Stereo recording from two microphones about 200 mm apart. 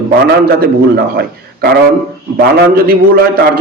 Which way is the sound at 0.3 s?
50° right (ahead or behind).